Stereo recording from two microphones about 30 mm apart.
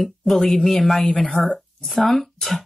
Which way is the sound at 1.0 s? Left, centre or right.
Left.